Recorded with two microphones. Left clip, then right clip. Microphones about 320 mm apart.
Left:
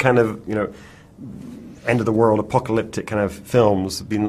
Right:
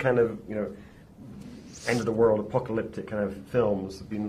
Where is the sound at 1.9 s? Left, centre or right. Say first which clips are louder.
Left 6 dB; left.